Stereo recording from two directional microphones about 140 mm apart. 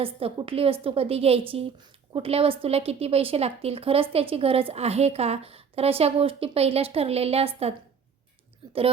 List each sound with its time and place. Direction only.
0.0 s speech: 40° right (ahead or behind)